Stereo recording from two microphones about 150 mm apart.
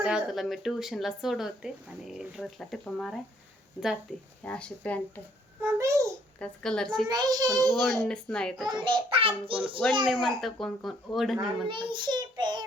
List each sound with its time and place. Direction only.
0.0 s speech: 5° right (ahead or behind); by 5.2 s 10° left (ahead or behind)
5.6 s a child's voice: 20° right (ahead or behind)
6.4 s speech: 5° left (ahead or behind)
7.1 s a child's voice: 25° right (ahead or behind)
7.7 s speech: centre (ahead or behind)
8.8 s a child's voice: 35° right (ahead or behind)
10.1 s speech: centre (ahead or behind)
11.3 s a child's voice: 35° right (ahead or behind)